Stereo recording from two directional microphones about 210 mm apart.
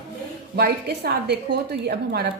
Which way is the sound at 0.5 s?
50° right (ahead or behind).